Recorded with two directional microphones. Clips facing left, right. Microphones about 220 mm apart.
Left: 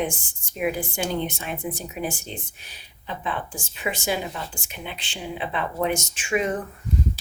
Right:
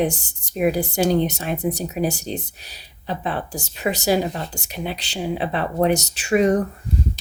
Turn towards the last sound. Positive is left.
turn(degrees=-40)  # may be behind; listen again after turning